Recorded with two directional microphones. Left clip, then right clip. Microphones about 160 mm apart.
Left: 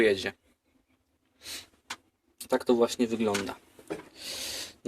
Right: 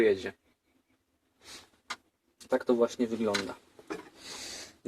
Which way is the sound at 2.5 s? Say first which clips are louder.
Left 2 dB; centre (ahead or behind).